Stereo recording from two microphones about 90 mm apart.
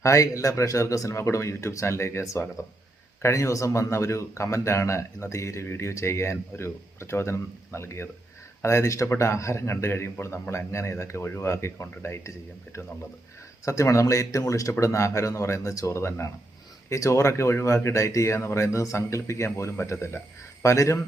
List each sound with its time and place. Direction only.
0.0 s speech: 35° left (ahead or behind)
13.7 s speech: 35° left (ahead or behind)